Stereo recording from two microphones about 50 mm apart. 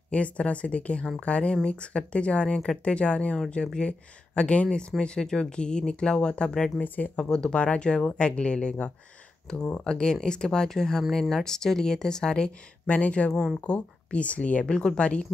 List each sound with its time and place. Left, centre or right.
0.1 s speech: left
12.8 s speech: left